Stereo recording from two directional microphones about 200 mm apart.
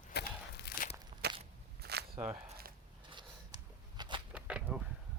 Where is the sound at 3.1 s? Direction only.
20° right (ahead or behind).